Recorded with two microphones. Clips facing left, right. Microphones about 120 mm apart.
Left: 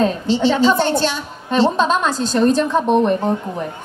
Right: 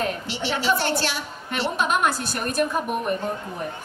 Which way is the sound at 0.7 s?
20° left (ahead or behind).